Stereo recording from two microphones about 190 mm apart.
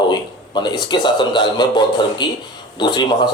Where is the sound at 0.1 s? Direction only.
25° left (ahead or behind).